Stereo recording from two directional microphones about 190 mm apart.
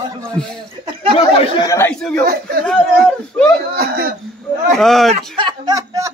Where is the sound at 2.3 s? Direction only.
50° right (ahead or behind).